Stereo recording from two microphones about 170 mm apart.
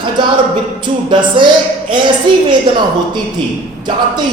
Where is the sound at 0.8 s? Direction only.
30° right (ahead or behind).